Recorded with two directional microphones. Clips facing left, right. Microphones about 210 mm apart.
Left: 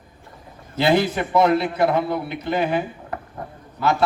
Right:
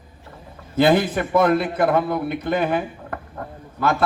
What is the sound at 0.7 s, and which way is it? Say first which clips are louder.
A man's voice: right 2 dB; 50° right (ahead or behind).